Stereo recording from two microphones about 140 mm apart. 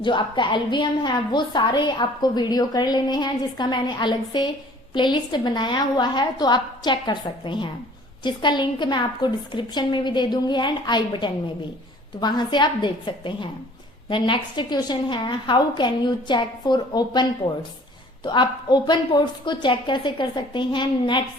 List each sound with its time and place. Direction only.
0.0 s a woman's voice: 35° left (ahead or behind)